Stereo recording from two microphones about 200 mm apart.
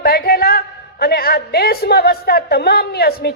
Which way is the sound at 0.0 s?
50° left (ahead or behind).